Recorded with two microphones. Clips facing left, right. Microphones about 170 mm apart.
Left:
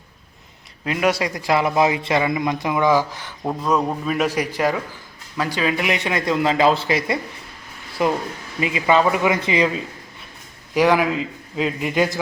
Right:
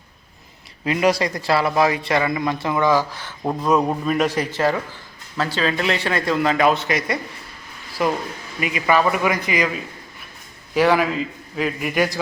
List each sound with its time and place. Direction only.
0.9 s speech: 5° left (ahead or behind)
3.4 s a man's voice: 5° right (ahead or behind); by 9.8 s 25° left (ahead or behind)
10.8 s a man's voice: 15° left (ahead or behind)